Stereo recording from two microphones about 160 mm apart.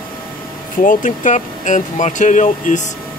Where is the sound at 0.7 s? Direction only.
55° left (ahead or behind).